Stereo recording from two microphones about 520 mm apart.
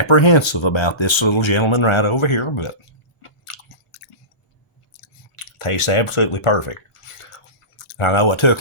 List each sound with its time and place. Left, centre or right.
0.0 s speech: left
4.9 s chewing: left